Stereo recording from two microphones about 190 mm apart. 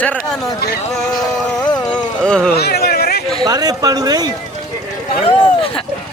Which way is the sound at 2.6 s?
55° left (ahead or behind).